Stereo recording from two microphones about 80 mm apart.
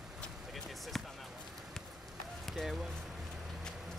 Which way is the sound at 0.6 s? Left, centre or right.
Centre.